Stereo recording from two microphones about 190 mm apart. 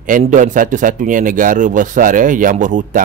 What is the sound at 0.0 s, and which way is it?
Speech, 45° right (ahead or behind).